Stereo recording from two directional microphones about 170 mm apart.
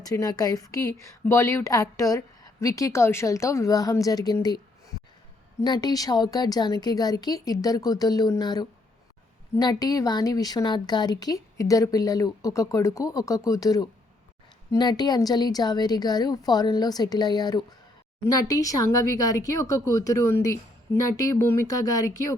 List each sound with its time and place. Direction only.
0.0 s a woman's voice: 20° left (ahead or behind)
5.6 s a woman's voice: 25° left (ahead or behind)